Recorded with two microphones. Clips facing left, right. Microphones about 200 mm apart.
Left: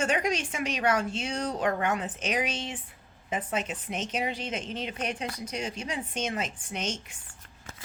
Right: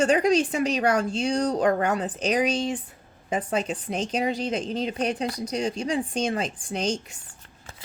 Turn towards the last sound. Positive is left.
turn(degrees=-35)  # may be behind; listen again after turning